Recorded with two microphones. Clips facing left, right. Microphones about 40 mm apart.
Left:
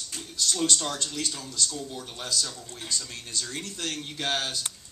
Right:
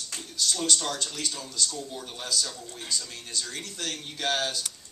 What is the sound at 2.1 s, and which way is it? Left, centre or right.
Speech, left.